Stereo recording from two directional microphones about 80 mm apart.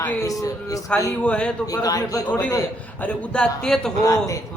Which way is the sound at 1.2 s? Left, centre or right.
Centre.